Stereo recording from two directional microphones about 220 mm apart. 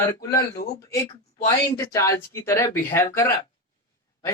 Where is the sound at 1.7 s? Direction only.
15° left (ahead or behind).